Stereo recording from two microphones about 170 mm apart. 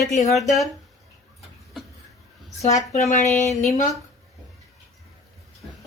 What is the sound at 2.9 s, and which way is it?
Speech, 40° left (ahead or behind).